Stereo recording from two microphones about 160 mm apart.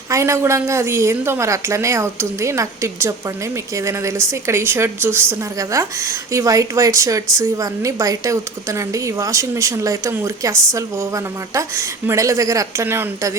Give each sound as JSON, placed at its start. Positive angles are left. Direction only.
{"t": 0.1, "sound": "a woman's voice", "side_deg": -15}